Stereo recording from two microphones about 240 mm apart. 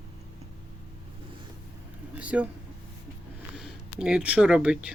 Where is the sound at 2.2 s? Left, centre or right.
Centre.